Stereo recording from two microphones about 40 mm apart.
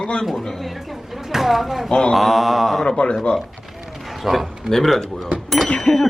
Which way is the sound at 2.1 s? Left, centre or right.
Centre.